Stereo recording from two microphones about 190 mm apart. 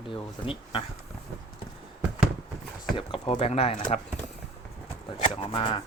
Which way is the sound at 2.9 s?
30° left (ahead or behind).